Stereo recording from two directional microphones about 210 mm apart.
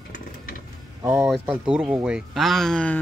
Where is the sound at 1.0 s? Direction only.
10° right (ahead or behind).